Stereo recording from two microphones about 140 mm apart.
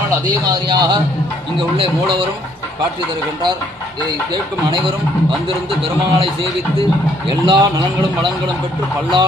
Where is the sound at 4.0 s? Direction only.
35° right (ahead or behind).